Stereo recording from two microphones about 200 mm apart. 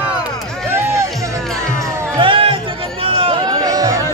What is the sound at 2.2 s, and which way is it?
Music, 25° right (ahead or behind).